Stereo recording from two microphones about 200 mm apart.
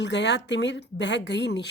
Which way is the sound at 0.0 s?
60° left (ahead or behind).